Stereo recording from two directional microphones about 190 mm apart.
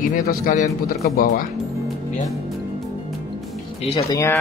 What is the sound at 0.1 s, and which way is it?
A man's voice, 45° left (ahead or behind).